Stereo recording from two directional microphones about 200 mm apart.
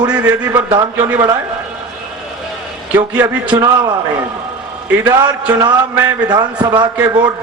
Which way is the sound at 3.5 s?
20° right (ahead or behind).